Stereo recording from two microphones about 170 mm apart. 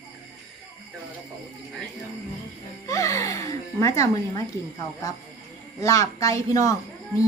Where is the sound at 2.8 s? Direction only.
20° left (ahead or behind).